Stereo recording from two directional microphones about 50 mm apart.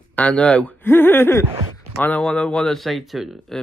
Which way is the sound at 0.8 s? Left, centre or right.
Left.